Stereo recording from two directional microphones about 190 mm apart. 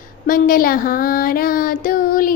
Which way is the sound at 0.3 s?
45° left (ahead or behind).